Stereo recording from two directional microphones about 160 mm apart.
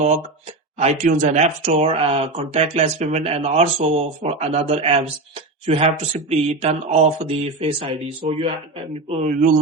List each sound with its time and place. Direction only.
0.8 s speech: 45° right (ahead or behind)